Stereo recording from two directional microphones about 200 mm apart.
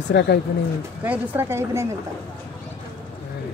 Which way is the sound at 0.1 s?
55° left (ahead or behind).